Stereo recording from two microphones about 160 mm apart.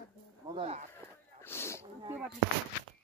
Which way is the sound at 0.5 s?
40° right (ahead or behind).